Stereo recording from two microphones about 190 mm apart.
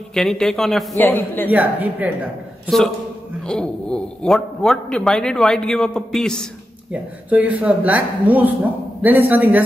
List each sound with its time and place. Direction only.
0.1 s a man's voice: 5° left (ahead or behind)
1.5 s a man's voice: 10° right (ahead or behind)
6.9 s a man's voice: 10° right (ahead or behind)